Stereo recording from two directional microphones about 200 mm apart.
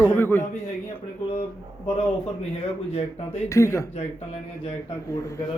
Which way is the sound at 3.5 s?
15° left (ahead or behind).